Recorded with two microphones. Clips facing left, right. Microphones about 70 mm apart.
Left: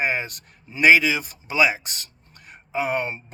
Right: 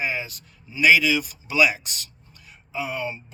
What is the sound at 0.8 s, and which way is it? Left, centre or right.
Speech, left.